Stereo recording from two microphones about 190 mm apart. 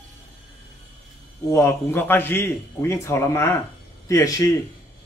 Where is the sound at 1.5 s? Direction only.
15° left (ahead or behind).